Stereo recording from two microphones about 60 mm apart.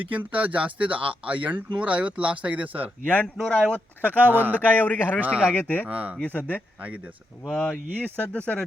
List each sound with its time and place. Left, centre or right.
0.0 s speech: right
3.3 s speech: centre
4.2 s speech: right
4.8 s speech: left
5.2 s speech: right
5.5 s speech: left
5.8 s speech: right
6.2 s speech: left
7.4 s speech: centre
7.9 s speech: left